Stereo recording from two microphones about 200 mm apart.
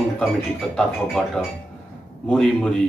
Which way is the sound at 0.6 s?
Centre (ahead or behind).